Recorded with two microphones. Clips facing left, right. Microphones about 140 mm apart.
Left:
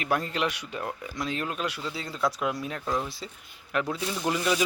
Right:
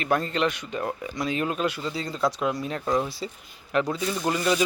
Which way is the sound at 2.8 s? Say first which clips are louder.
Right 5 dB; 15° right (ahead or behind).